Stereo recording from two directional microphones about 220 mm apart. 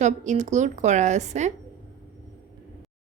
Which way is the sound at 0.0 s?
30° right (ahead or behind).